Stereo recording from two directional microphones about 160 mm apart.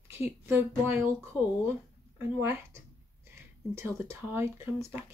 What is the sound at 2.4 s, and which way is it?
Speech, 15° right (ahead or behind).